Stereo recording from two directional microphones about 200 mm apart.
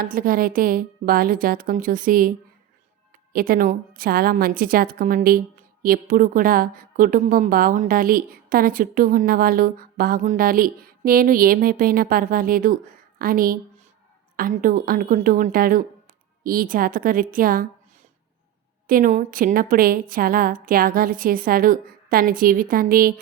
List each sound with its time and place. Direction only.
0.0 s a woman's voice: 45° right (ahead or behind)
3.3 s a woman's voice: 45° right (ahead or behind)
18.9 s a woman's voice: 45° right (ahead or behind)